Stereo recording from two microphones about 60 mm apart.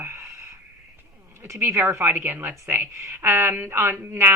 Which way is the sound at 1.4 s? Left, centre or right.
Right.